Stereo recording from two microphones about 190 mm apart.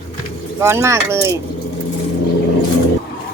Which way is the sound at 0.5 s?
15° right (ahead or behind).